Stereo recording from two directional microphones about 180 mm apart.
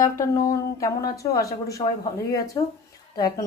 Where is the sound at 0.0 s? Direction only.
15° left (ahead or behind).